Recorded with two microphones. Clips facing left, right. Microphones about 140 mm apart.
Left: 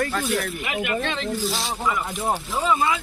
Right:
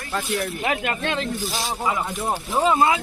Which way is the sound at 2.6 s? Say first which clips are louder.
Right 5 dB; 60° right (ahead or behind).